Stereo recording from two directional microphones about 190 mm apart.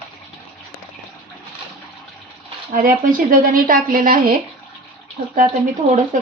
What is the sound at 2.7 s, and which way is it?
Speech, 45° right (ahead or behind).